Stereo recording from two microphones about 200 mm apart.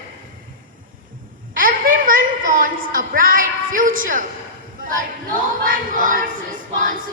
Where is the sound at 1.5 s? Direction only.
45° right (ahead or behind).